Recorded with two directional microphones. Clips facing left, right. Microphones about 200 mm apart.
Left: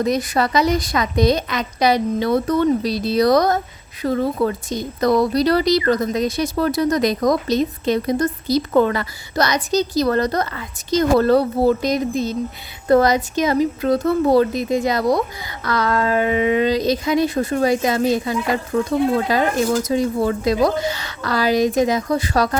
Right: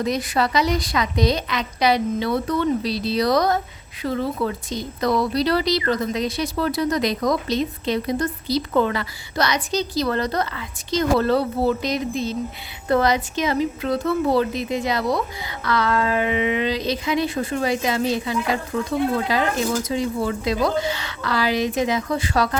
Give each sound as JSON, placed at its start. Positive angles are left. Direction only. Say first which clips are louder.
{"t": 0.0, "sound": "speech", "louder": "left 3 dB", "side_deg": 45}